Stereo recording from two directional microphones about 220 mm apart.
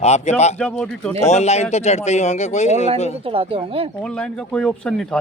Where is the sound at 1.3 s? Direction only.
30° left (ahead or behind).